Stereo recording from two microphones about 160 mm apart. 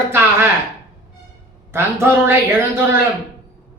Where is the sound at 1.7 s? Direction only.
15° right (ahead or behind).